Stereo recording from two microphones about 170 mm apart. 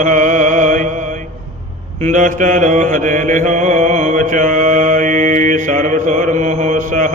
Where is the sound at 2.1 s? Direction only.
45° right (ahead or behind).